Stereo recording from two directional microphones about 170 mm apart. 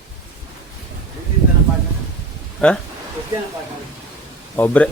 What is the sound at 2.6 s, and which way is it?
Speech, 5° left (ahead or behind).